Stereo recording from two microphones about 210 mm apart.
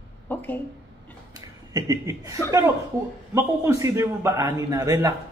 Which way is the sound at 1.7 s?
15° right (ahead or behind).